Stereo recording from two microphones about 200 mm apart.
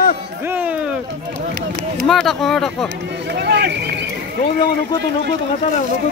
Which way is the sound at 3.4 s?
55° right (ahead or behind).